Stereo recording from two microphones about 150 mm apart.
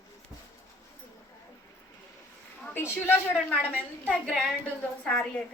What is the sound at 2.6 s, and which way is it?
A woman's voice, 10° left (ahead or behind).